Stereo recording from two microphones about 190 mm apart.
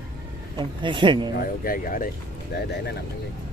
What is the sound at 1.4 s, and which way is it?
Speech, 50° left (ahead or behind).